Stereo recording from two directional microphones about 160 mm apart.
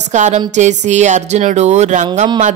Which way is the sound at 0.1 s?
50° right (ahead or behind).